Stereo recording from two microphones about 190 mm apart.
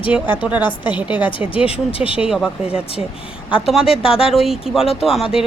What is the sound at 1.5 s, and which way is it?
Speech, 30° left (ahead or behind).